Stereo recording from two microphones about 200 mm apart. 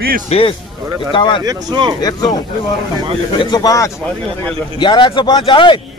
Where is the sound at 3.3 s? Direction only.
20° left (ahead or behind).